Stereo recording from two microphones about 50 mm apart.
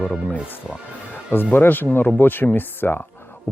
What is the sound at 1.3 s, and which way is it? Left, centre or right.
Speech, left.